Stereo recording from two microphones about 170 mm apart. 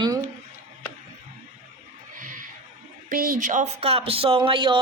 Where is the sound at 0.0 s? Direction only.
20° right (ahead or behind).